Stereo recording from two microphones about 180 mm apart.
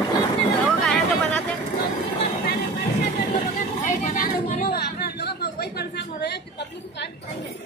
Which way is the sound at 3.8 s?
40° left (ahead or behind).